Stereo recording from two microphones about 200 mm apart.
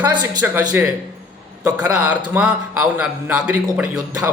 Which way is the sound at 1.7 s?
5° right (ahead or behind).